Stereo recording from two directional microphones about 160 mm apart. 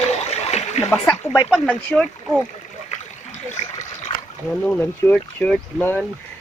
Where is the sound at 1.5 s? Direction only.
Centre (ahead or behind).